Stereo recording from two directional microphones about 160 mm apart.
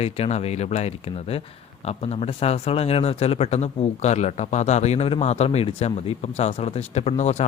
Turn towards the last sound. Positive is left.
turn(degrees=45)  # may be behind; listen again after turning